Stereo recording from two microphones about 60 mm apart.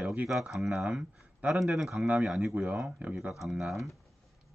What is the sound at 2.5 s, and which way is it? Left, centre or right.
Speech, centre.